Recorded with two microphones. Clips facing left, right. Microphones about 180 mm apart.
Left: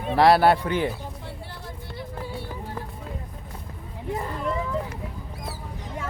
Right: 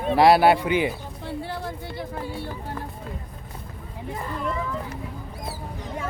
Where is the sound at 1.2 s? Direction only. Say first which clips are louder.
Right 8 dB; 90° right.